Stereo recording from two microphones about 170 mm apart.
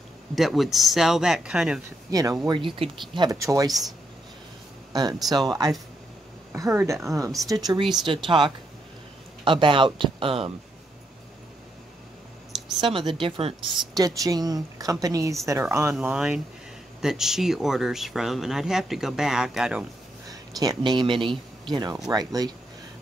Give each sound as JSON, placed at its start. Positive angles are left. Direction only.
{"t": 0.4, "sound": "speech", "side_deg": 0}
{"t": 2.0, "sound": "a woman's voice", "side_deg": -20}
{"t": 4.9, "sound": "a woman's voice", "side_deg": -25}
{"t": 12.8, "sound": "a woman's voice", "side_deg": -30}
{"t": 13.9, "sound": "a woman's voice", "side_deg": -20}
{"t": 20.2, "sound": "a woman's voice", "side_deg": -20}